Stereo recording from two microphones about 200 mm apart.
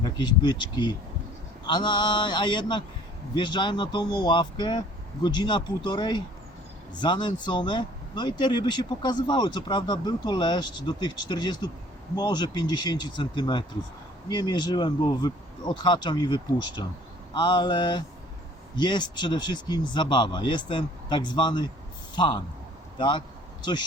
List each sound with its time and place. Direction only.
0.0 s speech: 20° left (ahead or behind)